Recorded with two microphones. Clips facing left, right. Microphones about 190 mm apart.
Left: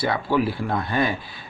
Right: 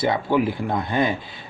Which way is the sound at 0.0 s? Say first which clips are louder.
Right 2 dB; 20° right (ahead or behind).